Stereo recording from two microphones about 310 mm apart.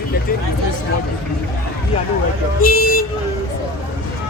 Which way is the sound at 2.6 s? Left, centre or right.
Left.